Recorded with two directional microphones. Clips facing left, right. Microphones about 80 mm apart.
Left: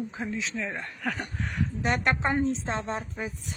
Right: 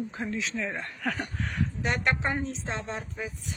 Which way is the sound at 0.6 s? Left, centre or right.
Centre.